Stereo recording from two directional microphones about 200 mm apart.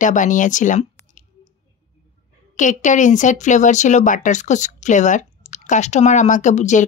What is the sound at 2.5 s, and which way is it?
Speech, 40° left (ahead or behind).